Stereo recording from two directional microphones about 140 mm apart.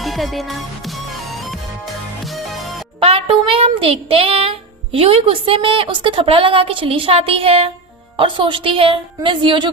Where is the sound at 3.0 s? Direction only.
45° right (ahead or behind).